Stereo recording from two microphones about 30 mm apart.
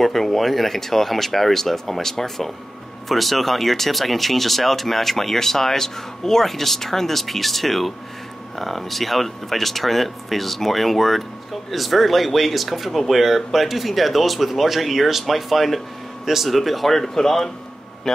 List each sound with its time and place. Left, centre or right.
0.0 s a man's voice: centre